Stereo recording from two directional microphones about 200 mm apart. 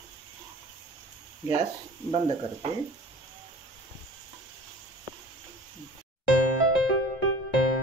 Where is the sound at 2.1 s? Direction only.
30° right (ahead or behind).